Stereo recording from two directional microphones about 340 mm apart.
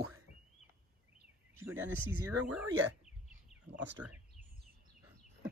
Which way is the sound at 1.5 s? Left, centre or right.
Centre.